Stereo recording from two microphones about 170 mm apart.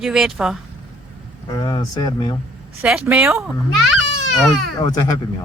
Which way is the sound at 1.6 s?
25° left (ahead or behind).